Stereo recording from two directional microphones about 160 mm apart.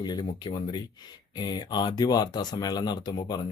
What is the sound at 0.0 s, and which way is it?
A man's voice, 25° left (ahead or behind).